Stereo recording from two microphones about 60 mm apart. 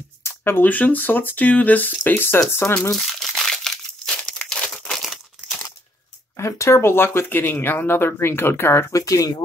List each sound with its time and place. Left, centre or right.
0.2 s speech: left
2.9 s crumpling: centre
6.3 s speech: left
8.9 s speech: left